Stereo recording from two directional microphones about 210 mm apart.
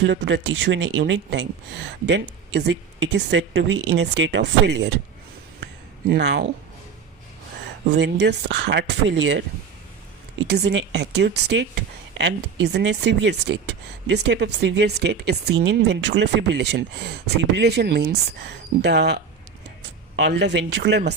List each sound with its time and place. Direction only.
0.0 s speech: 60° right (ahead or behind)
6.1 s speech: 55° right (ahead or behind)
7.9 s speech: 55° right (ahead or behind)